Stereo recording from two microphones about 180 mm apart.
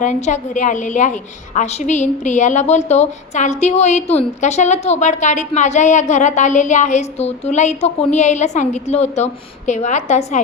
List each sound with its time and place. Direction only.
0.0 s a woman's voice: 40° left (ahead or behind)